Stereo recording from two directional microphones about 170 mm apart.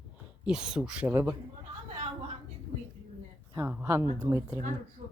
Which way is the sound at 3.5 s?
10° right (ahead or behind).